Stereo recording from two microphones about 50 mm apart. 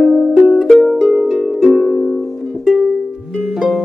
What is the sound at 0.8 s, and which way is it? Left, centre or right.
Harp, centre.